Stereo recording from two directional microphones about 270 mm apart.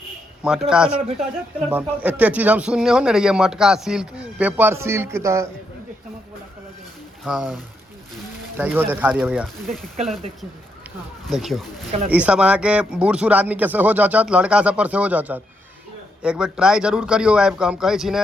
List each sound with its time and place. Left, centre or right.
0.4 s speech: centre
7.3 s speech: centre
11.3 s speech: centre
11.9 s speech: centre
12.1 s speech: centre